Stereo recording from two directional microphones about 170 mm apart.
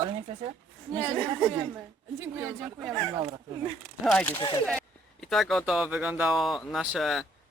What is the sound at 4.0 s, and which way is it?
Speech, centre (ahead or behind).